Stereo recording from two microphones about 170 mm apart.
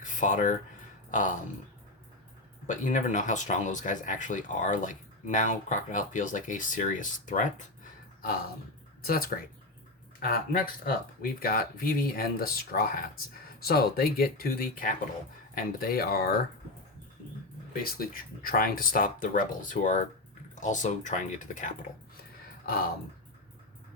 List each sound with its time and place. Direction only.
0.0 s speech: 50° left (ahead or behind)
2.6 s speech: 45° left (ahead or behind)
9.0 s speech: 60° left (ahead or behind)
17.8 s speech: 60° left (ahead or behind)